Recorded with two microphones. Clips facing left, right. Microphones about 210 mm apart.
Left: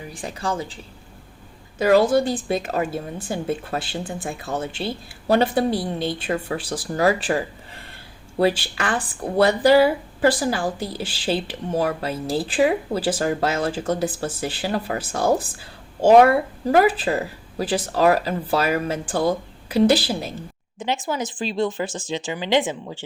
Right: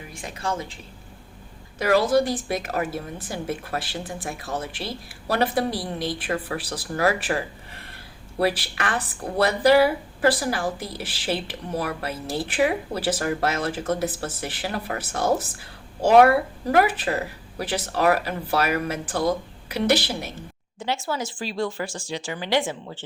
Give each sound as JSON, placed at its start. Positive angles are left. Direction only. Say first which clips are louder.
{"t": 0.1, "sound": "a woman's voice", "louder": "left 2 dB", "side_deg": 30}
{"t": 2.0, "sound": "speech", "louder": "left 1 dB", "side_deg": 25}
{"t": 8.4, "sound": "speech", "louder": "left 4 dB", "side_deg": 25}
{"t": 20.7, "sound": "speech", "louder": "left 2 dB", "side_deg": 20}